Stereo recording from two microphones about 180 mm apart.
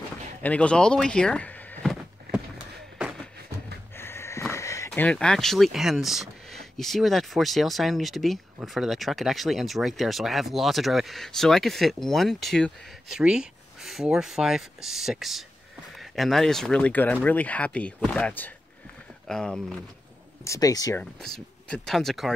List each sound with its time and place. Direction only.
0.4 s door: 5° left (ahead or behind)
3.9 s sniff: 15° left (ahead or behind)
4.5 s speech: 15° left (ahead or behind)
20.4 s speech: 20° left (ahead or behind)
21.0 s speech: 5° left (ahead or behind)